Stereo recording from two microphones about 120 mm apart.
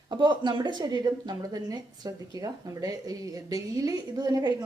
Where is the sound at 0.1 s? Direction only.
40° right (ahead or behind).